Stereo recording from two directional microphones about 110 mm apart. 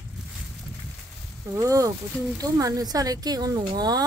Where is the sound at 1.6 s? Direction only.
30° right (ahead or behind).